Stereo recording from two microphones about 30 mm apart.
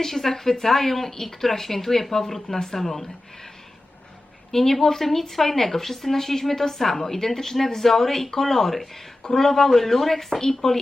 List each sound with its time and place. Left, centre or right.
0.0 s speech: centre
4.5 s speech: centre